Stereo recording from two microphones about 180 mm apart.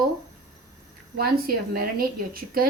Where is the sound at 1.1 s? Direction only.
55° right (ahead or behind).